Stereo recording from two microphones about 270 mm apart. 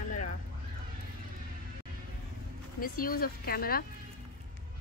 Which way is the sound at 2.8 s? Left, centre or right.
Left.